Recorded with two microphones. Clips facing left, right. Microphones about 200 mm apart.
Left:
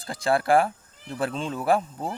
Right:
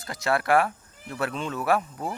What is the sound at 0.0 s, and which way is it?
A man's voice, 30° left (ahead or behind).